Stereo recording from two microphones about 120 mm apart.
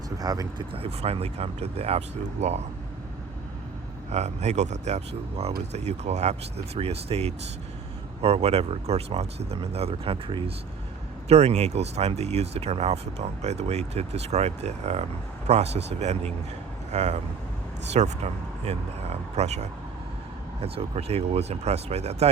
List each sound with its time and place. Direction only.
0.2 s speech: 30° right (ahead or behind)
0.7 s speech: 55° right (ahead or behind)
4.1 s speech: 65° right (ahead or behind); by 10.5 s 50° right (ahead or behind)
11.3 s speech: 60° right (ahead or behind)